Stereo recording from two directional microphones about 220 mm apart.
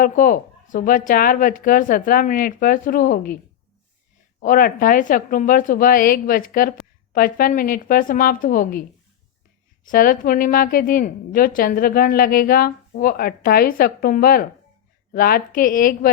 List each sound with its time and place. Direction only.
0.0 s a woman's voice: 40° left (ahead or behind)
4.4 s a woman's voice: 40° left (ahead or behind)
9.8 s a woman's voice: 40° left (ahead or behind)